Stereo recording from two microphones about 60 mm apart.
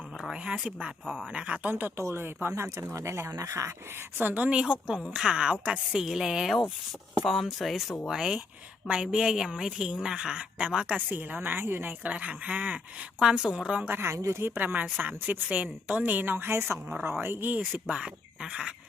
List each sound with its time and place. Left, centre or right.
0.4 s speech: right
1.0 s speech: centre
1.3 s speech: right
2.0 s speech: right
2.5 s speech: right
4.2 s a woman's voice: right
4.4 s speech: centre
10.9 s a woman's voice: right
12.0 s speech: right
13.2 s speech: centre
13.8 s a woman's voice: right
14.1 s a woman's voice: right
17.6 s speech: centre